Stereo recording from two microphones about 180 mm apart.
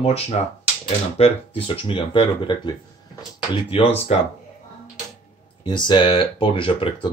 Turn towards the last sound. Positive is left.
turn(degrees=30)  # may be behind; listen again after turning